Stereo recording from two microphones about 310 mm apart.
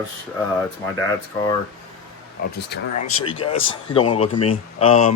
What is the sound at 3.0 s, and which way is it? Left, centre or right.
Speech, centre.